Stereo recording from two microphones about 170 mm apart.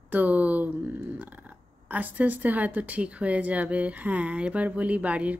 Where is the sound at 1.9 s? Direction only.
10° right (ahead or behind).